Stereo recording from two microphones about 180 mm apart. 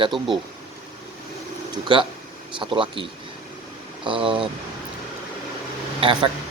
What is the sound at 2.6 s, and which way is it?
Speech, 25° right (ahead or behind).